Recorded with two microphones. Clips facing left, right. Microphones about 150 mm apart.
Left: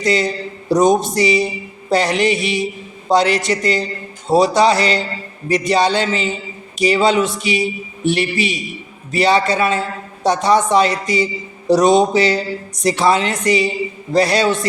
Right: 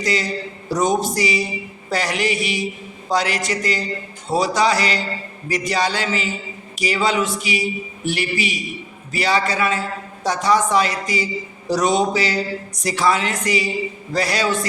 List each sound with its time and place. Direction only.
0.0 s a woman's voice: 25° left (ahead or behind)